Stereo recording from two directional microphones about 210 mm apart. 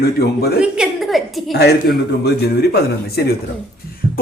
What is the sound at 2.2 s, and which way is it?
A man's voice, 50° left (ahead or behind).